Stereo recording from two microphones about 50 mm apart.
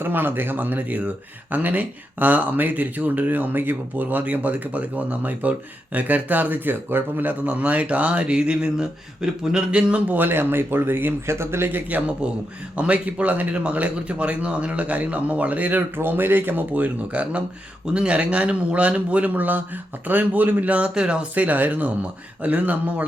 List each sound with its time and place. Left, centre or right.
0.0 s speech: right
7.4 s speech: right
10.1 s speech: right
11.3 s speech: right
11.9 s speech: right
16.0 s speech: right; by 21.2 s centre
21.3 s speech: right